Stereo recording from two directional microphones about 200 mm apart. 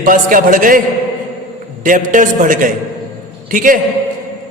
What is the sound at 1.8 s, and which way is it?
A man's voice, 40° right (ahead or behind).